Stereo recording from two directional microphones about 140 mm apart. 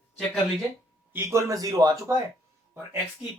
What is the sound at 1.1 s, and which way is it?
Speech, 15° right (ahead or behind).